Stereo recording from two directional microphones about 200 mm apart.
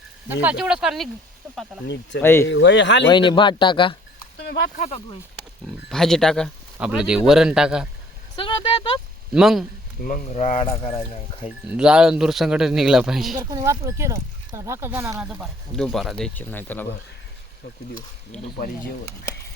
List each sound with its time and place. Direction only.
0.4 s speech: 5° right (ahead or behind)
2.2 s speech: 10° left (ahead or behind)
2.5 s speech: 65° left (ahead or behind)
3.1 s speech: 25° left (ahead or behind)
4.4 s a sound: 55° left (ahead or behind)
5.9 s speech: centre (ahead or behind)
8.4 s a sound: 25° left (ahead or behind)
9.3 s speech: centre (ahead or behind)
10.0 s speech: 40° left (ahead or behind)
11.4 s speech: 5° right (ahead or behind)
13.4 s speech: 15° right (ahead or behind)
15.3 s speech: centre (ahead or behind)
18.3 s speech: 5° left (ahead or behind)